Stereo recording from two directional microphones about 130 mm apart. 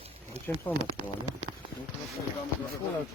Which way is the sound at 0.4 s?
55° right (ahead or behind).